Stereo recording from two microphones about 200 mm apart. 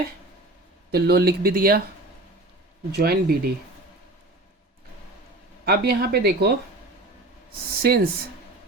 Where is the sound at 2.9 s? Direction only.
50° right (ahead or behind).